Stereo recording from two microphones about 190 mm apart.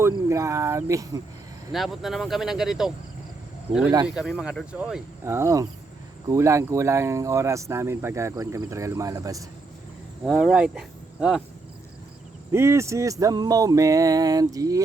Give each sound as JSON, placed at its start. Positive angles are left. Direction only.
{"t": 0.0, "sound": "speech", "side_deg": -15}
{"t": 1.7, "sound": "speech", "side_deg": 0}
{"t": 10.2, "sound": "speech", "side_deg": 0}
{"t": 12.5, "sound": "speech", "side_deg": -15}